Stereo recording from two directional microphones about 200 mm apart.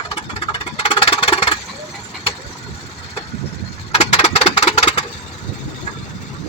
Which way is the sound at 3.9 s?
30° left (ahead or behind).